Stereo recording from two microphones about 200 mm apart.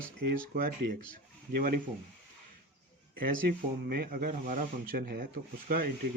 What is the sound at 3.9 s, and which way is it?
Speech, 50° right (ahead or behind).